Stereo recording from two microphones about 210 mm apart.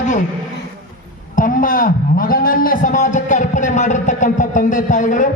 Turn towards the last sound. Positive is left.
turn(degrees=35)  # may be behind; listen again after turning